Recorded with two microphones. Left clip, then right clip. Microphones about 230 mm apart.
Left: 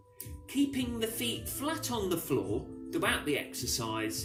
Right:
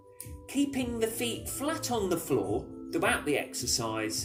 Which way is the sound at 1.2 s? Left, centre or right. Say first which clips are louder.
Right 2 dB; left.